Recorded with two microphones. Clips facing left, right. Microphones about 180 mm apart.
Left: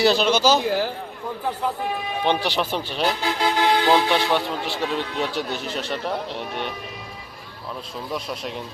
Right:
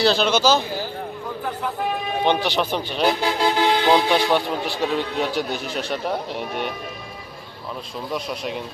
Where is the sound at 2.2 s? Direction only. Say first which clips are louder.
Right 2 dB; 5° left (ahead or behind).